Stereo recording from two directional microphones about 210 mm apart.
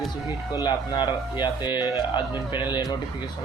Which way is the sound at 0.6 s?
20° left (ahead or behind).